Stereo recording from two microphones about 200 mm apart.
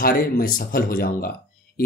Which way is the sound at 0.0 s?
45° left (ahead or behind).